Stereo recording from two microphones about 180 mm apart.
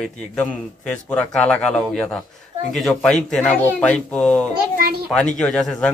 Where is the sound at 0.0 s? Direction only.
5° left (ahead or behind).